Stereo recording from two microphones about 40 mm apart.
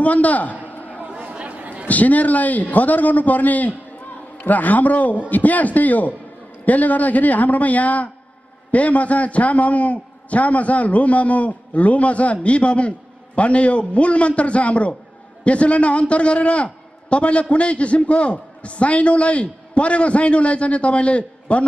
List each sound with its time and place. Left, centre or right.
0.0 s a sound: left
1.0 s chatter: right
1.9 s a man's voice: left